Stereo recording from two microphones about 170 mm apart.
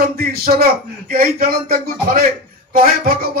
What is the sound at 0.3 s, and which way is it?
Speech, 65° right (ahead or behind).